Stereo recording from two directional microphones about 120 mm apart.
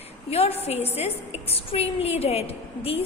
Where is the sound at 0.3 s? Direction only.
55° left (ahead or behind).